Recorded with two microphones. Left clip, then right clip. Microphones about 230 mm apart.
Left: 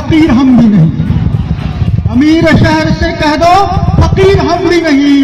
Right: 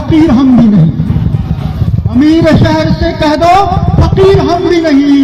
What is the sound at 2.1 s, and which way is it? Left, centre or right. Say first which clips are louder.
A man's voice: even; right.